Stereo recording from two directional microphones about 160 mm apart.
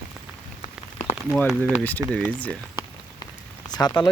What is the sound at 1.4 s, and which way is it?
Speech, 10° left (ahead or behind).